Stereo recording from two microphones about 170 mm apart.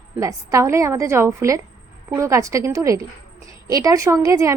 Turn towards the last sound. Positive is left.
turn(degrees=-20)  # may be behind; listen again after turning